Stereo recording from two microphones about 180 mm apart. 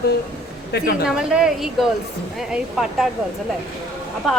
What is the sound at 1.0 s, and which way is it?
Speech, 5° right (ahead or behind).